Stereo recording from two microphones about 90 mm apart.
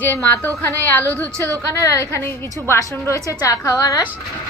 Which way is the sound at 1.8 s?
35° left (ahead or behind).